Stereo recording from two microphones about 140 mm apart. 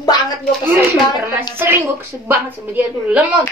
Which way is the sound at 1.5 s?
15° right (ahead or behind).